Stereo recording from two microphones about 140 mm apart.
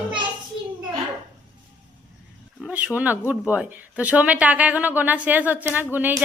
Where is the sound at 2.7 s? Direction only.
10° right (ahead or behind).